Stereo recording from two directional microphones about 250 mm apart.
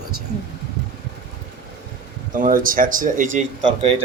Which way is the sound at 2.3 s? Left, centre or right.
Right.